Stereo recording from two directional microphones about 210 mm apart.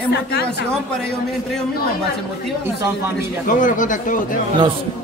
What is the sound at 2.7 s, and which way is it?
Speech, 15° right (ahead or behind).